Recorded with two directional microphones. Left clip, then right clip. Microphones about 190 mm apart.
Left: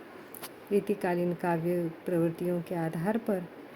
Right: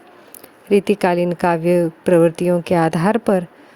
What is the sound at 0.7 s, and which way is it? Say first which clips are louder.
Speech: right 14 dB; 55° right (ahead or behind).